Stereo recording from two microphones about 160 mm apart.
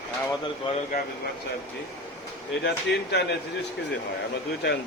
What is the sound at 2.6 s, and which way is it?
Speech, 90° left.